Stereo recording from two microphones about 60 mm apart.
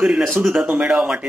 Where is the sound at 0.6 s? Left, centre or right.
Centre.